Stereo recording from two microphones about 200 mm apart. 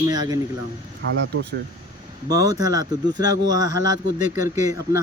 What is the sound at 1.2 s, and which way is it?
Speech, 60° right (ahead or behind).